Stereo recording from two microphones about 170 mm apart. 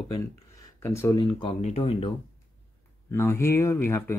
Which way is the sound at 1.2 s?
30° left (ahead or behind).